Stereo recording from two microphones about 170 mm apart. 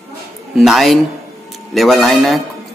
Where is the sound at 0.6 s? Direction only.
Centre (ahead or behind).